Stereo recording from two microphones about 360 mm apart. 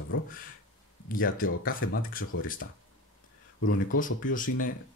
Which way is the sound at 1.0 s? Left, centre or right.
Left.